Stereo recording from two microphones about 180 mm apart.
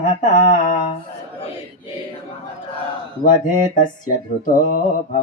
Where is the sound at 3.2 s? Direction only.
50° left (ahead or behind).